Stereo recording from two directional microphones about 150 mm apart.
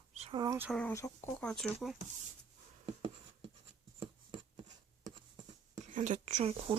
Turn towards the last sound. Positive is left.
turn(degrees=-45)  # may be behind; listen again after turning